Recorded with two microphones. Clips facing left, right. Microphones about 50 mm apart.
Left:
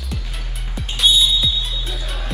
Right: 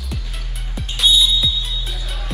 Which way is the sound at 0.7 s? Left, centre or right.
Centre.